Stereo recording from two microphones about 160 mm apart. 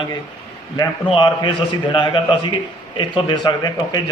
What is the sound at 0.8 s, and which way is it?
A man's voice, 30° left (ahead or behind).